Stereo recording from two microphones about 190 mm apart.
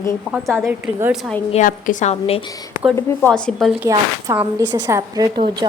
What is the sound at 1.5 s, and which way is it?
Speech, 40° left (ahead or behind).